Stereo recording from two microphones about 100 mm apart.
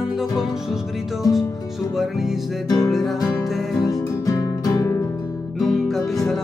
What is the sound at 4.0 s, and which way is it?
Music, 35° left (ahead or behind).